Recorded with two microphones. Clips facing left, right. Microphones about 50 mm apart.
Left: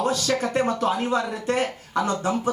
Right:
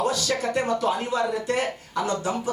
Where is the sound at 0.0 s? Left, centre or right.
Left.